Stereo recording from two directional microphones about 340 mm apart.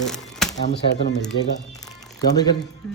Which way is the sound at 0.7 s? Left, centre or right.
Left.